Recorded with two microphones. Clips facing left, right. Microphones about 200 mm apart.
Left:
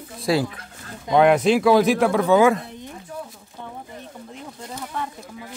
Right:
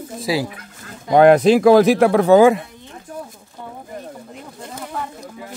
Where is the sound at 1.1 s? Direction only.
40° right (ahead or behind).